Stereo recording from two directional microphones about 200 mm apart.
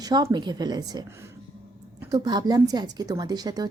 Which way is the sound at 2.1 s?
20° right (ahead or behind).